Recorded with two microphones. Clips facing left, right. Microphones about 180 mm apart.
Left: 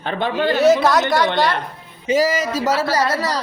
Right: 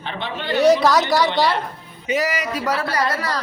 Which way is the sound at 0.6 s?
Centre (ahead or behind).